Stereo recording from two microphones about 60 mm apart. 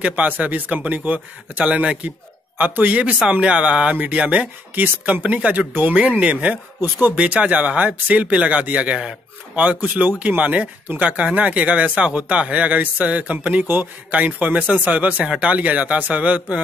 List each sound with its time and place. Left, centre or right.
0.0 s speech: right